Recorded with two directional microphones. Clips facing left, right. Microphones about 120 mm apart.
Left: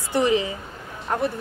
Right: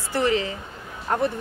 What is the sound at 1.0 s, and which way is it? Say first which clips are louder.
Speech: right 1 dB; centre (ahead or behind).